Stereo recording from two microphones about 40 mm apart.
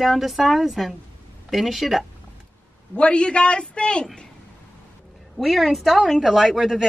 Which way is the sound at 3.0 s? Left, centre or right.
Left.